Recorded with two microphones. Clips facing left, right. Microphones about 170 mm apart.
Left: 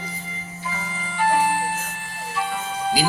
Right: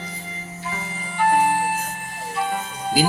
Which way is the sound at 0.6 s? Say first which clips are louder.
Even; 60° right (ahead or behind).